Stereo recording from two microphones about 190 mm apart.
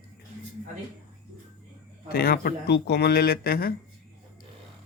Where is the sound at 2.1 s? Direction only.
55° left (ahead or behind).